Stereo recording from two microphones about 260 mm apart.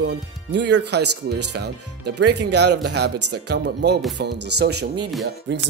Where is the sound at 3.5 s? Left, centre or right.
Right.